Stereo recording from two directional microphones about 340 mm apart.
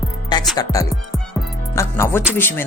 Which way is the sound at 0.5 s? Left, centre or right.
Centre.